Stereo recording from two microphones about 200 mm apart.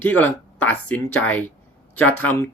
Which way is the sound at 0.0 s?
10° left (ahead or behind).